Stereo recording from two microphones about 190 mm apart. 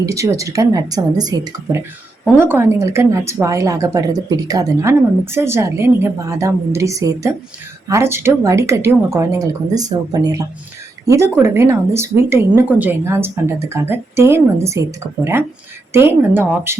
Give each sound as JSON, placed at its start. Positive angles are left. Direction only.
{"t": 0.0, "sound": "a woman's voice", "side_deg": -15}